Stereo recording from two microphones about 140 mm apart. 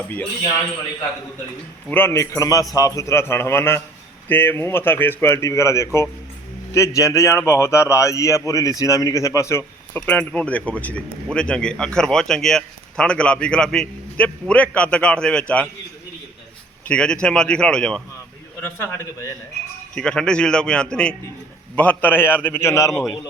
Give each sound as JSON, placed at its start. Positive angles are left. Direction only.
{"t": 1.9, "sound": "a man's voice", "side_deg": 15}
{"t": 16.9, "sound": "speech", "side_deg": 5}
{"t": 18.6, "sound": "speech", "side_deg": 15}
{"t": 20.0, "sound": "a man's voice", "side_deg": 5}